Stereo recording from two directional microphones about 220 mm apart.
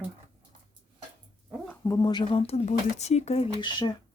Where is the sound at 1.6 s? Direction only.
10° left (ahead or behind).